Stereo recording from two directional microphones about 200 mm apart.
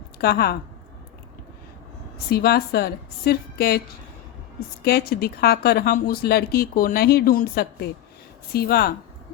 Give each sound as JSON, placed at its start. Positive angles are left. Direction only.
{"t": 0.2, "sound": "speech", "side_deg": 50}
{"t": 2.3, "sound": "speech", "side_deg": 50}